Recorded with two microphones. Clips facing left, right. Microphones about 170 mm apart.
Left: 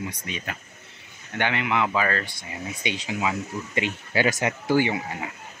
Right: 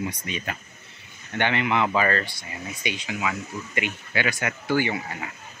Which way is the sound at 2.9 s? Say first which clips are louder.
Left 3 dB; 35° left (ahead or behind).